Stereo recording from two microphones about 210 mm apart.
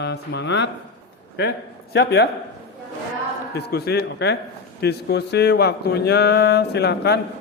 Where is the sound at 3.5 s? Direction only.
50° left (ahead or behind).